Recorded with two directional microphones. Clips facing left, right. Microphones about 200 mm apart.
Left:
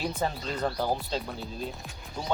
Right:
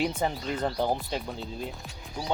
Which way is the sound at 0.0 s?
15° right (ahead or behind).